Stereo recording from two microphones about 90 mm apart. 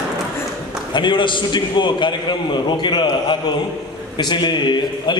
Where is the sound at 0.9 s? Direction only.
60° left (ahead or behind).